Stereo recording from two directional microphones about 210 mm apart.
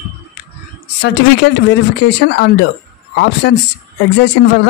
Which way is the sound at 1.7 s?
55° left (ahead or behind).